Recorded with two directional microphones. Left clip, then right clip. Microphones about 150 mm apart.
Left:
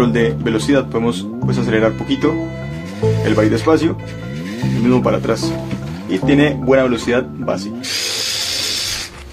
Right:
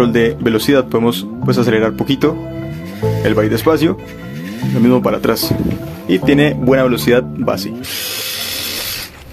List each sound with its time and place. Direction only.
0.0 s speech: 40° right (ahead or behind)